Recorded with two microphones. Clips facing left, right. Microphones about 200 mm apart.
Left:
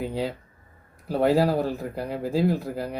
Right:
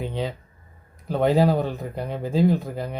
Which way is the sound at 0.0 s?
5° left (ahead or behind).